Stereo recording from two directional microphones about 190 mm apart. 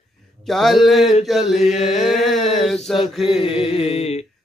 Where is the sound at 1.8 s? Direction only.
Centre (ahead or behind).